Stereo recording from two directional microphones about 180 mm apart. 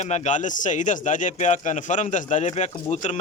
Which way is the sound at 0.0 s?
40° left (ahead or behind).